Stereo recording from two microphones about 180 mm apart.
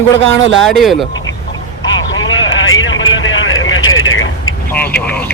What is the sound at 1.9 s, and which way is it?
Vehicle, 90° left.